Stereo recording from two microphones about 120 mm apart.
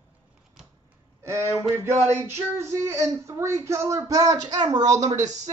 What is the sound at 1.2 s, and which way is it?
Speech, 25° right (ahead or behind).